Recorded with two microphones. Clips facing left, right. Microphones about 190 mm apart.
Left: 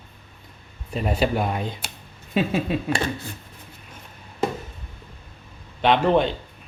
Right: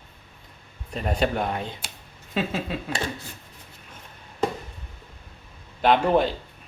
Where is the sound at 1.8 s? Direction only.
60° left (ahead or behind).